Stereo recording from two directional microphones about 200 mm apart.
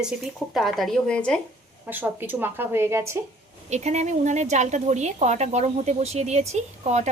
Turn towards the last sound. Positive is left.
turn(degrees=-35)  # may be behind; listen again after turning